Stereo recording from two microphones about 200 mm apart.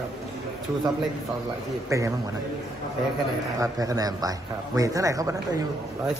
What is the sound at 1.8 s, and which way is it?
Speech, 15° right (ahead or behind).